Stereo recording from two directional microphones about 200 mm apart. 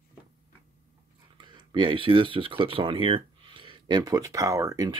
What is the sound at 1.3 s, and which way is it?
Speech, 25° right (ahead or behind).